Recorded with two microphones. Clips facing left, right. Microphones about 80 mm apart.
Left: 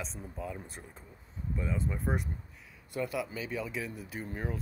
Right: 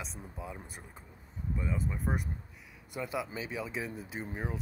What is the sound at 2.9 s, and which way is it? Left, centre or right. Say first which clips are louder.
Speech: left 2 dB; centre.